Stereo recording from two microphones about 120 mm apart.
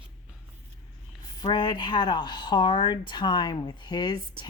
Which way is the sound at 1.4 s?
40° left (ahead or behind).